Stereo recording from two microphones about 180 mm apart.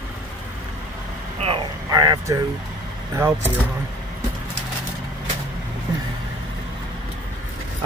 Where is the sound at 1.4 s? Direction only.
35° right (ahead or behind).